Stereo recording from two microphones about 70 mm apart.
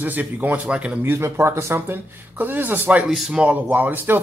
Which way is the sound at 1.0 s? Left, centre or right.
Right.